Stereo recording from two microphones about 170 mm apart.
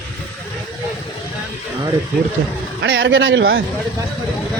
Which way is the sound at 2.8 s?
90° right.